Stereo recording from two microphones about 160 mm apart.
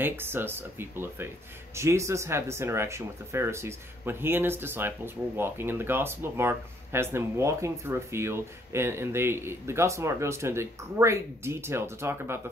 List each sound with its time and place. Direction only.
0.0 s speech: 15° right (ahead or behind)